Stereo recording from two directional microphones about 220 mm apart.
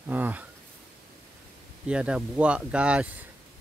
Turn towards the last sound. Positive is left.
turn(degrees=-5)  # may be behind; listen again after turning